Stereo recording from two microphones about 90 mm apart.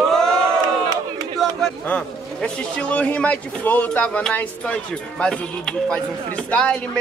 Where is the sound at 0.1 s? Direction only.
5° left (ahead or behind).